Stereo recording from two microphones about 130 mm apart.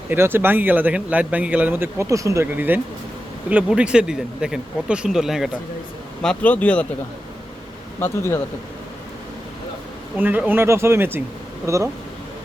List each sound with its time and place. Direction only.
0.1 s speech: 15° right (ahead or behind)
6.2 s speech: 10° left (ahead or behind)
7.9 s speech: 20° left (ahead or behind)
10.2 s speech: 15° right (ahead or behind)